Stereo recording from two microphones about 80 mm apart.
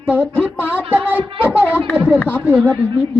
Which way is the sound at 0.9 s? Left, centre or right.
Right.